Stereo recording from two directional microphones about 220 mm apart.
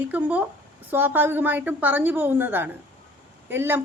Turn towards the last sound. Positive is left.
turn(degrees=-10)  # may be behind; listen again after turning